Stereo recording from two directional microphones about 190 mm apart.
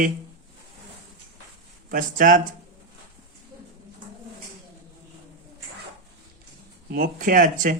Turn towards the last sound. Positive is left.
turn(degrees=-45)  # may be behind; listen again after turning